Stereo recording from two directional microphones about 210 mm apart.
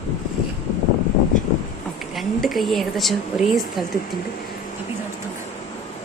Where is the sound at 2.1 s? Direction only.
Centre (ahead or behind).